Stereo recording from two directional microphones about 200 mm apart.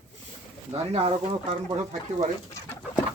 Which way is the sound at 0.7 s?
30° right (ahead or behind).